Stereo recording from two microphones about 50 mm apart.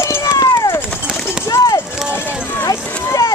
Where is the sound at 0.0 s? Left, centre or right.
Left.